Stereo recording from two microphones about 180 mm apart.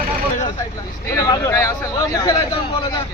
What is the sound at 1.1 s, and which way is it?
Speech, 20° left (ahead or behind).